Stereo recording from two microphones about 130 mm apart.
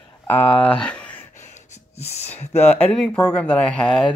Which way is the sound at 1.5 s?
55° left (ahead or behind).